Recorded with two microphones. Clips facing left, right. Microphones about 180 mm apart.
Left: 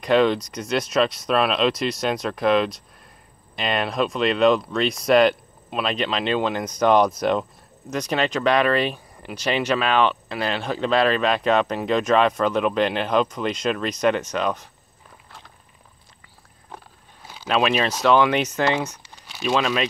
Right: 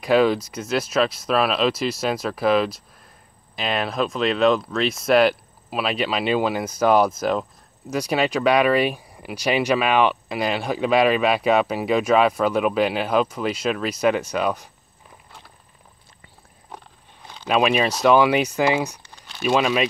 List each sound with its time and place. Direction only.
0.0 s speech: 5° right (ahead or behind)
16.7 s biting: 5° left (ahead or behind)
17.5 s speech: 10° right (ahead or behind)
19.0 s crumpling: 5° left (ahead or behind)
19.4 s speech: 10° right (ahead or behind)